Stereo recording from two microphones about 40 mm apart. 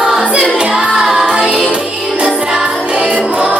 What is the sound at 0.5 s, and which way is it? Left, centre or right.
Music, right.